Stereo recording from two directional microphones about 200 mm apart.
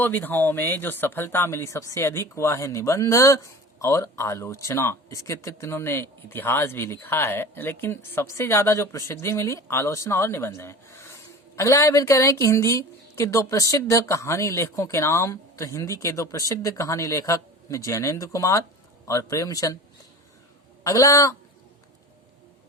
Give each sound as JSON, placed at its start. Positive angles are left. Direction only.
{"t": 0.0, "sound": "speech", "side_deg": 10}
{"t": 20.8, "sound": "speech", "side_deg": 15}